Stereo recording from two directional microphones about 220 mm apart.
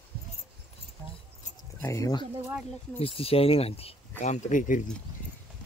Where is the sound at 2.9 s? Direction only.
25° left (ahead or behind).